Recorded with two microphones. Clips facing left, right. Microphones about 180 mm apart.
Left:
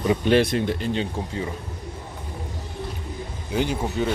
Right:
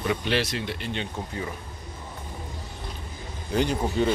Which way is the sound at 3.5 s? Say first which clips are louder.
Even; 10° left (ahead or behind).